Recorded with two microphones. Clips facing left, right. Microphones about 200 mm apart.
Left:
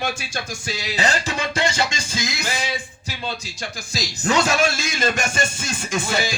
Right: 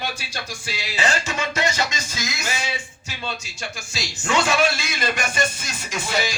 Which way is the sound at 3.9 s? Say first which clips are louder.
Left 3 dB; 40° left (ahead or behind).